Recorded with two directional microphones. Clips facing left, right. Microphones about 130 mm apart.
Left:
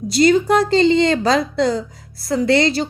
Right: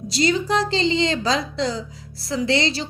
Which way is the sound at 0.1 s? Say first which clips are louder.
Left 7 dB; 50° left (ahead or behind).